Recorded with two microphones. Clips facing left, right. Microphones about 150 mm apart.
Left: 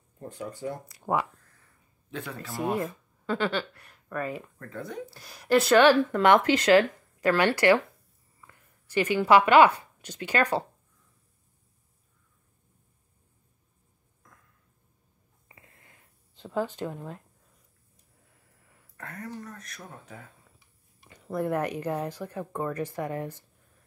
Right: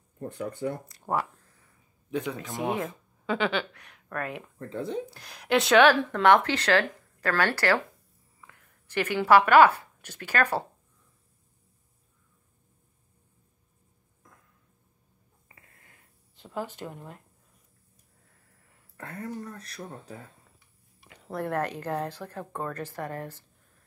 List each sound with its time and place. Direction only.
0.3 s speech: 60° right (ahead or behind)
1.1 s speech: 10° left (ahead or behind)
2.0 s speech: 15° right (ahead or behind)
2.5 s speech: centre (ahead or behind)
4.6 s speech: 25° right (ahead or behind)
5.0 s speech: 5° left (ahead or behind)
15.4 s snort: 25° left (ahead or behind)
16.7 s speech: 20° left (ahead or behind)
18.9 s speech: 30° right (ahead or behind)
21.4 s speech: 10° left (ahead or behind)